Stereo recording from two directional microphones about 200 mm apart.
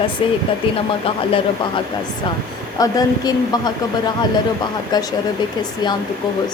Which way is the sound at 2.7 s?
20° left (ahead or behind).